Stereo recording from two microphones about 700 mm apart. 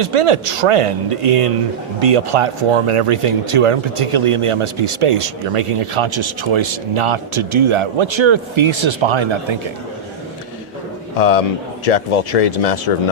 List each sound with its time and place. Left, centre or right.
0.0 s speech: right
11.2 s speech: left